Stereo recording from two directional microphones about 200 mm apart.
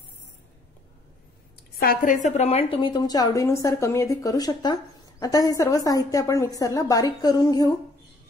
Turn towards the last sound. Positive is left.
turn(degrees=20)  # may be behind; listen again after turning